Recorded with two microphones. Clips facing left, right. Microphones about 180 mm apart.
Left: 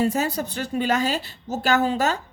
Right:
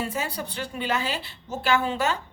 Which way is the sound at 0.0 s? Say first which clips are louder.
Left 7 dB; 45° left (ahead or behind).